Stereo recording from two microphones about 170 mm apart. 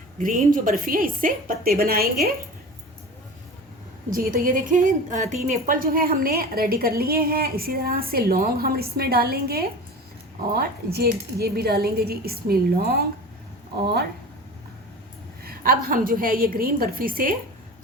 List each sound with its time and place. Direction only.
0.2 s a woman's voice: 55° right (ahead or behind)
4.1 s a woman's voice: 60° right (ahead or behind)
15.4 s a woman's voice: 60° right (ahead or behind)